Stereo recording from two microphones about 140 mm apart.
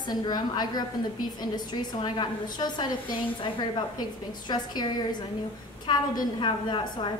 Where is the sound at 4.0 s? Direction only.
30° left (ahead or behind).